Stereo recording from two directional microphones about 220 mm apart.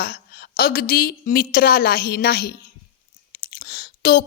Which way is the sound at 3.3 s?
45° left (ahead or behind).